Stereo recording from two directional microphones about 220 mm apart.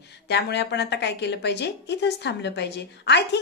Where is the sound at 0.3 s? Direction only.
50° left (ahead or behind).